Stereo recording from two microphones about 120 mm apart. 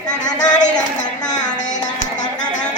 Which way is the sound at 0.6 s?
90° left.